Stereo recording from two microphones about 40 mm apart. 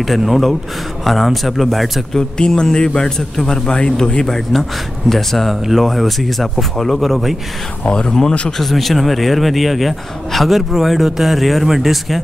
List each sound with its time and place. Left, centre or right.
0.0 s speech: centre
2.1 s a man's voice: left
5.1 s speech: centre
7.8 s speech: centre